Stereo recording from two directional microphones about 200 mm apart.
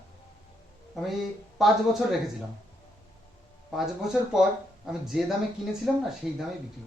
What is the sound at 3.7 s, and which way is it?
A man's voice, centre (ahead or behind).